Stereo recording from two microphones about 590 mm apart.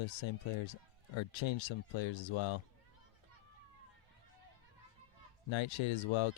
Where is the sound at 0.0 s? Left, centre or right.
Left.